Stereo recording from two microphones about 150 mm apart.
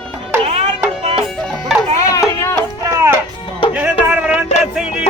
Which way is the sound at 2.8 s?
20° right (ahead or behind).